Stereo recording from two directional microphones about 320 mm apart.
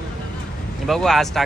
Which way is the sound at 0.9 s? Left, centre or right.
Centre.